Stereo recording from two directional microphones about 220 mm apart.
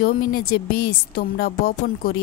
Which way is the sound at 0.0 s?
40° left (ahead or behind).